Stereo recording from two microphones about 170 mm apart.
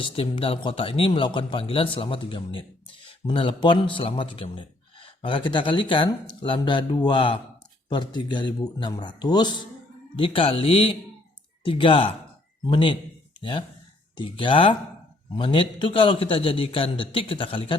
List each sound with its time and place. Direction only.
0.0 s a man's voice: 35° left (ahead or behind)